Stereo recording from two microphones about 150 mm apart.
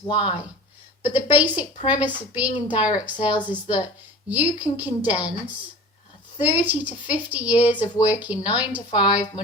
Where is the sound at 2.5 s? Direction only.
35° left (ahead or behind).